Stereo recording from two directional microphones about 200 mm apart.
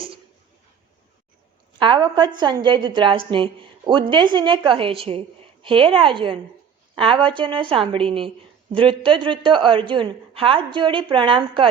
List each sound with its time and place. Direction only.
1.8 s a woman's voice: 25° right (ahead or behind)